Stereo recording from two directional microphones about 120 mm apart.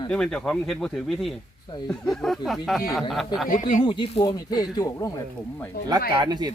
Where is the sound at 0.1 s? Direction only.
5° left (ahead or behind).